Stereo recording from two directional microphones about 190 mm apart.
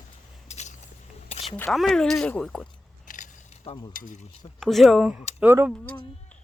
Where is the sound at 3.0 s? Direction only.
45° left (ahead or behind).